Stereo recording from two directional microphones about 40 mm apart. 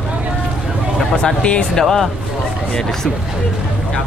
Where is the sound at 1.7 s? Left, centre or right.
Centre.